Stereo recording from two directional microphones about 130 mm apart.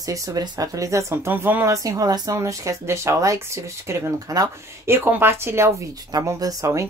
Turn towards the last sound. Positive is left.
turn(degrees=-25)  # may be behind; listen again after turning